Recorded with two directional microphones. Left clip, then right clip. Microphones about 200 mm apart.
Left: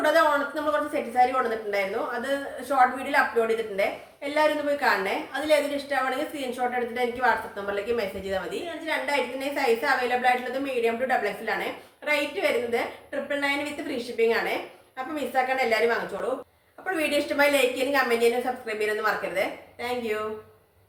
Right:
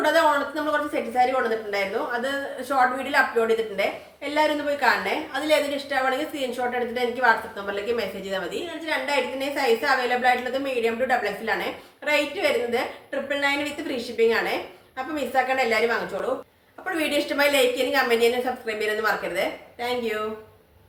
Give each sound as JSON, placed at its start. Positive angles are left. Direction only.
{"t": 0.0, "sound": "a woman's voice", "side_deg": -5}